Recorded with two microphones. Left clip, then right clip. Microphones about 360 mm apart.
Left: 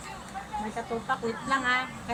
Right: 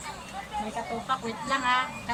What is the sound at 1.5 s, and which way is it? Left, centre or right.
Speech, centre.